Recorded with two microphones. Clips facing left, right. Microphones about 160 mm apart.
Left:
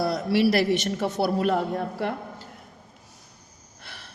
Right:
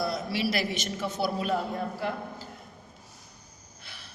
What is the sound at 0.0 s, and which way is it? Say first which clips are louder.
A woman's voice: left 7 dB; 70° left (ahead or behind).